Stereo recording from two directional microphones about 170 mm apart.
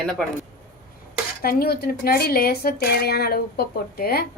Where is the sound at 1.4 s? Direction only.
65° left (ahead or behind).